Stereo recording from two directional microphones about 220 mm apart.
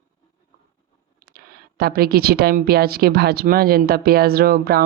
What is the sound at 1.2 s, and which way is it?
Speech, 45° right (ahead or behind).